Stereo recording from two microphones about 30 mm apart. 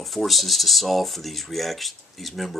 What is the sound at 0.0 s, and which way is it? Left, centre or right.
Speech, centre.